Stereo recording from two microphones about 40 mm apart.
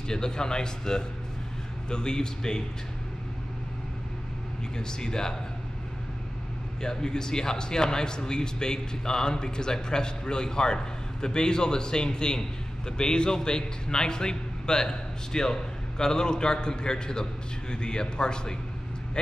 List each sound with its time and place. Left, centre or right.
0.1 s a man's voice: centre
4.7 s a man's voice: centre
6.8 s a man's voice: centre